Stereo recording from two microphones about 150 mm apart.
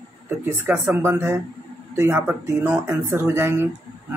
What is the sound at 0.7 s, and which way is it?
Speech, 15° right (ahead or behind).